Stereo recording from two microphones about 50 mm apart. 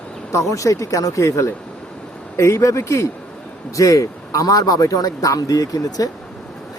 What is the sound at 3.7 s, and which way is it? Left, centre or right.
Speech, left.